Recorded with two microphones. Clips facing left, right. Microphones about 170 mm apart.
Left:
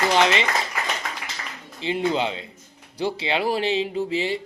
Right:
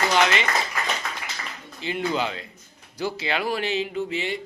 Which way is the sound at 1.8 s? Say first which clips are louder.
Left 3 dB; 30° left (ahead or behind).